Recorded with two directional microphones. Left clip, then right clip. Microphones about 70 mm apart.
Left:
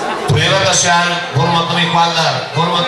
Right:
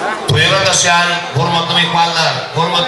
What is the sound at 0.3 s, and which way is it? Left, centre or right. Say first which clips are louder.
A man's voice: right 1 dB; right.